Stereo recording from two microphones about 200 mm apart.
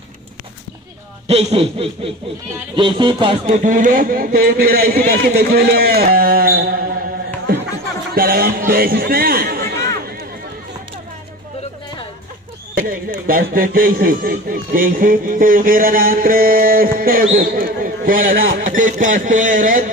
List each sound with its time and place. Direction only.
1.2 s speech: 30° right (ahead or behind)
3.4 s speech: 40° right (ahead or behind)
8.1 s speech: 45° right (ahead or behind)
12.7 s speech: 45° right (ahead or behind)
18.6 s a sound: 40° right (ahead or behind)